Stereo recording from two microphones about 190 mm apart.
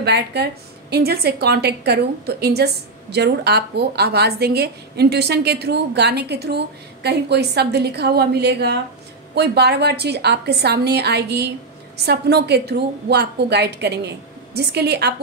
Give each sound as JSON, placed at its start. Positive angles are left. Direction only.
{"t": 0.0, "sound": "a woman's voice", "side_deg": -60}